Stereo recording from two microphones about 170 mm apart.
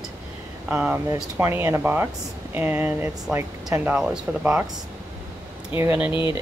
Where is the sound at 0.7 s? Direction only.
10° right (ahead or behind).